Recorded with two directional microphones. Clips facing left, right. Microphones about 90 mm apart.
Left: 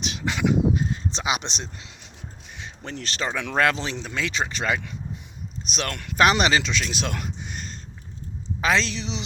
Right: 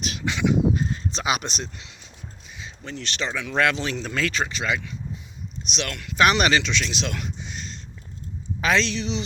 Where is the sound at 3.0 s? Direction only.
35° left (ahead or behind).